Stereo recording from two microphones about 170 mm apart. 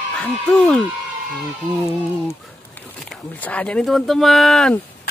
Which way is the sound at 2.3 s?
10° left (ahead or behind).